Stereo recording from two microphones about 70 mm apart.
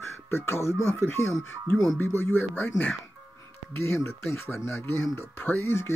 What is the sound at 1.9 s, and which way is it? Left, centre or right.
Speech, left.